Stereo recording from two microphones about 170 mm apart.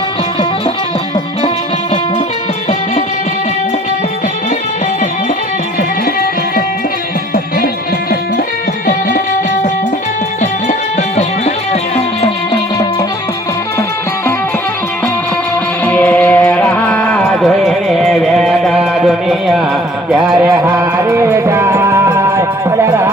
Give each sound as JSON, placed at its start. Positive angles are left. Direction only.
{"t": 11.2, "sound": "music", "side_deg": 35}
{"t": 15.8, "sound": "music", "side_deg": 10}
{"t": 20.3, "sound": "music", "side_deg": -15}